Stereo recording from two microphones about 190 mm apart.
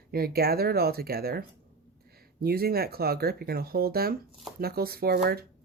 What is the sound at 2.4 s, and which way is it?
Speech, 55° right (ahead or behind).